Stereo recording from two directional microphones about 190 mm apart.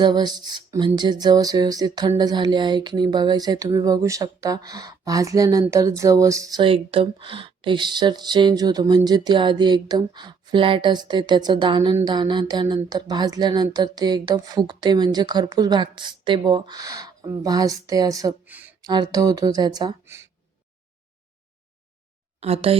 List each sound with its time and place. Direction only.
0.0 s speech: 20° right (ahead or behind)
18.8 s speech: 20° right (ahead or behind)
22.4 s speech: 30° right (ahead or behind)